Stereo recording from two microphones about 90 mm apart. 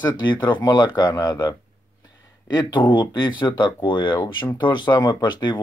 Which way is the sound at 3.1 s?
55° left (ahead or behind).